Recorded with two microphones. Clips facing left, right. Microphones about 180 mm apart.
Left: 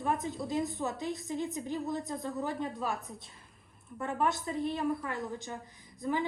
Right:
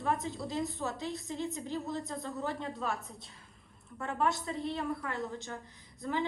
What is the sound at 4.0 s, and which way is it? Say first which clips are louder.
Speech: left 1 dB; 15° left (ahead or behind).